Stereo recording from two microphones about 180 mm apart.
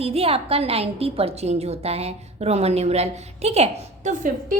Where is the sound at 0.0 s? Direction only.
35° right (ahead or behind).